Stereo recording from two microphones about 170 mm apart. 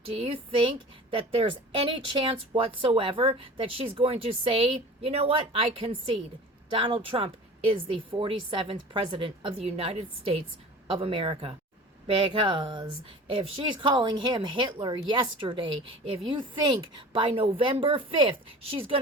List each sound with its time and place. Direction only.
0.0 s a woman's voice: 35° right (ahead or behind)